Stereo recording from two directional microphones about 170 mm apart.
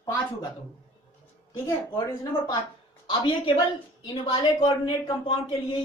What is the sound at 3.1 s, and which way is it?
A woman's voice, 30° left (ahead or behind).